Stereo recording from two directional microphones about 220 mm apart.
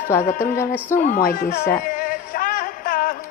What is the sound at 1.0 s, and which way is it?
Music, 40° left (ahead or behind).